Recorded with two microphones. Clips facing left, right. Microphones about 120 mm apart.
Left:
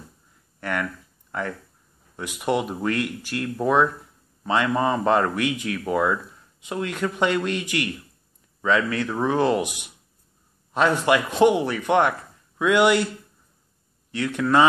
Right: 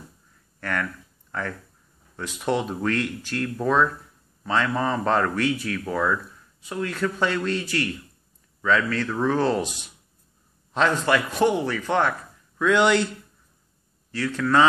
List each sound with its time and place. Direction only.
0.6 s speech: 15° left (ahead or behind)
2.1 s speech: 15° left (ahead or behind)
14.1 s speech: 20° left (ahead or behind)